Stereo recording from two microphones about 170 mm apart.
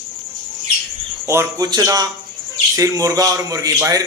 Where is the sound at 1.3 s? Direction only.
20° right (ahead or behind).